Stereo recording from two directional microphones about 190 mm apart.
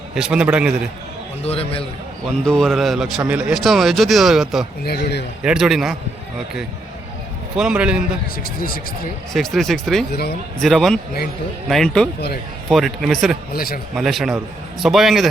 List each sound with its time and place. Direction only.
0.1 s speech: 5° right (ahead or behind)
1.5 s a man's voice: 30° left (ahead or behind)
2.4 s speech: 5° left (ahead or behind)
4.8 s speech: 55° left (ahead or behind)
5.4 s speech: 5° right (ahead or behind)
7.5 s speech: 5° right (ahead or behind)
8.4 s speech: 50° left (ahead or behind)
9.3 s speech: centre (ahead or behind)
10.1 s speech: 55° left (ahead or behind)
10.6 s speech: centre (ahead or behind)
13.5 s speech: 50° left (ahead or behind)
13.9 s speech: centre (ahead or behind)